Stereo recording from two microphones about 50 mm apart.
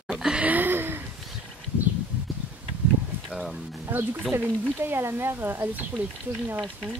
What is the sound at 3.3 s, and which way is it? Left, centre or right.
Speech, centre.